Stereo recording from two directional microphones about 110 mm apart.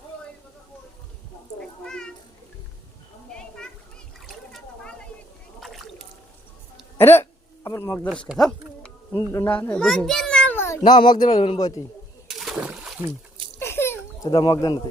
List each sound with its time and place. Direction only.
1.5 s cat: 5° left (ahead or behind)
3.3 s children playing: 5° left (ahead or behind)
4.3 s splash: 5° left (ahead or behind)
5.5 s rowboat: centre (ahead or behind)
7.0 s hiccup: 20° left (ahead or behind)
7.9 s speech: 10° left (ahead or behind)
8.4 s a sound: 10° left (ahead or behind)
9.1 s a child's voice: 25° left (ahead or behind)
10.8 s speech: 40° left (ahead or behind)
12.3 s splash: 5° right (ahead or behind)
13.6 s a sound: 20° left (ahead or behind)
14.3 s speech: 45° left (ahead or behind)